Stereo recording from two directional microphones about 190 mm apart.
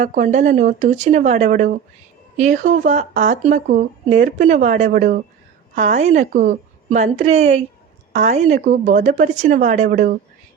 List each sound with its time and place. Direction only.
0.0 s speech: 40° right (ahead or behind)